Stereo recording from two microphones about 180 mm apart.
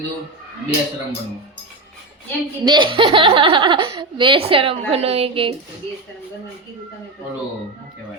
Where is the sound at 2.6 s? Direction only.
25° right (ahead or behind).